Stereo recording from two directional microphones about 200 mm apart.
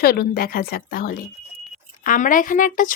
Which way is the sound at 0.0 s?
50° left (ahead or behind).